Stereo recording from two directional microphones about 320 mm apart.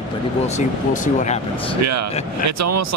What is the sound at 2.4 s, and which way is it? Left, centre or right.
Speech, right.